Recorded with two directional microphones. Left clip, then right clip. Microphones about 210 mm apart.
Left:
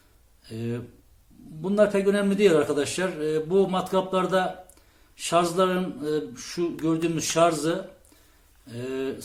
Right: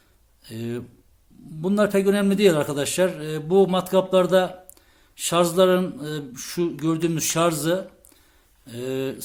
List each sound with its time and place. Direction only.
0.4 s a man's voice: 50° right (ahead or behind)